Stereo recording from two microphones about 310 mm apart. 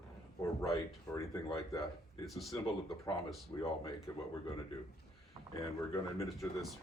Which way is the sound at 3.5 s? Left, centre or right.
Centre.